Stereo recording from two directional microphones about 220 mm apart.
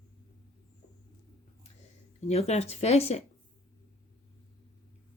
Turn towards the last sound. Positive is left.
turn(degrees=30)  # may be behind; listen again after turning